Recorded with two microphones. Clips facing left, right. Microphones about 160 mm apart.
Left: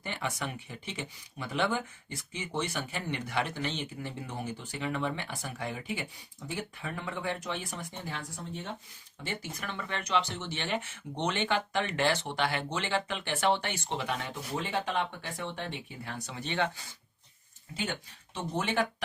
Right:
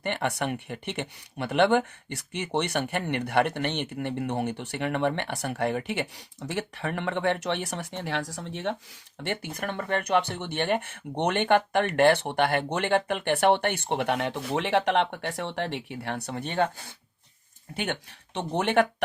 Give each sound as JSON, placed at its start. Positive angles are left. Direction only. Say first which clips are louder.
{"t": 0.0, "sound": "speech", "louder": "right 7 dB", "side_deg": -65}
{"t": 9.2, "sound": "speech", "louder": "right 7 dB", "side_deg": -65}
{"t": 18.3, "sound": "speech", "louder": "right 7 dB", "side_deg": -65}